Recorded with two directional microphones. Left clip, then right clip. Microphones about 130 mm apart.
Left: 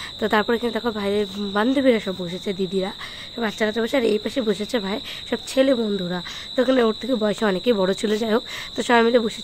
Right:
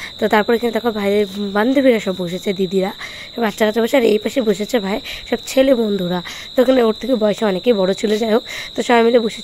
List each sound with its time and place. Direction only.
0.2 s speech: 20° right (ahead or behind)
6.7 s speech: 20° right (ahead or behind)